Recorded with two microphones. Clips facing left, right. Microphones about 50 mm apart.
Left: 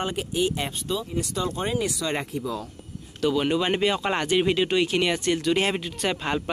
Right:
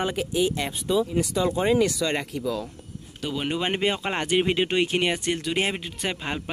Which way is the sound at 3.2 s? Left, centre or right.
Centre.